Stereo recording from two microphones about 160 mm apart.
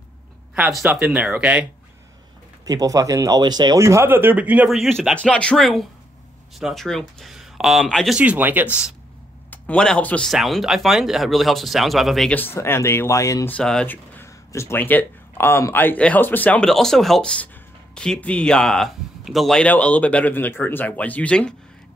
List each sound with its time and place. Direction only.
0.6 s speech: centre (ahead or behind)
2.6 s speech: 25° right (ahead or behind)
9.5 s speech: 5° left (ahead or behind)
13.6 s speech: 5° left (ahead or behind)